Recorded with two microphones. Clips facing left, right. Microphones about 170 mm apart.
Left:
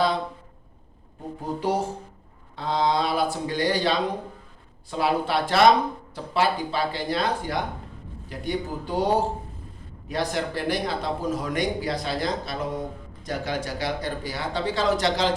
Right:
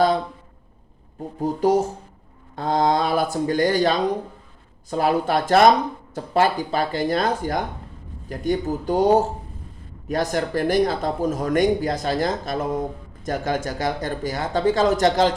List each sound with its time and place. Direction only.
1.4 s speech: 40° right (ahead or behind)